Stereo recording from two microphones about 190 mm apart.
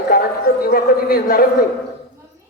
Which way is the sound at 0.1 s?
50° left (ahead or behind).